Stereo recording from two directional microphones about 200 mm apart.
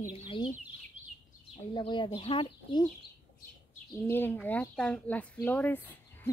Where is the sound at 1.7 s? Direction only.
25° left (ahead or behind).